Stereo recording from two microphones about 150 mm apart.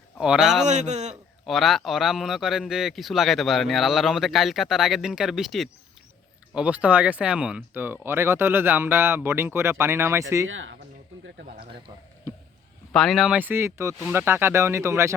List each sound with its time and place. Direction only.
0.2 s a man's voice: 5° right (ahead or behind)
0.7 s a man's voice: 50° right (ahead or behind)
1.1 s a man's voice: centre (ahead or behind); by 10.4 s 20° right (ahead or behind)
12.9 s speech: centre (ahead or behind); by 15.1 s 20° right (ahead or behind)